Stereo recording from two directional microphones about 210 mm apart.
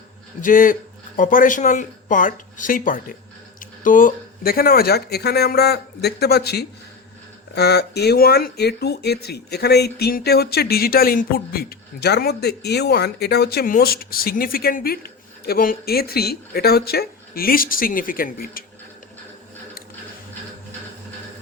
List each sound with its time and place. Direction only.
0.4 s speech: 40° left (ahead or behind)